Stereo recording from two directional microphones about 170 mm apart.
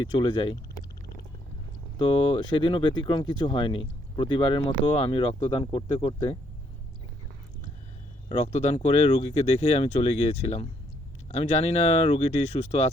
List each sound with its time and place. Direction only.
0.0 s speech: 30° left (ahead or behind)
2.0 s speech: 30° left (ahead or behind)
8.3 s speech: 40° left (ahead or behind)